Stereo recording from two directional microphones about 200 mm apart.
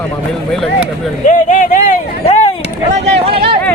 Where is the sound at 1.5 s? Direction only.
40° left (ahead or behind).